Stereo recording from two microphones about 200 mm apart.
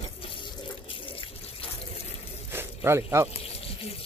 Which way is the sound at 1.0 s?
25° left (ahead or behind).